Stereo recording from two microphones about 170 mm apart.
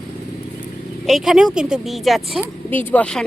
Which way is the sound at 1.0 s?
Centre (ahead or behind).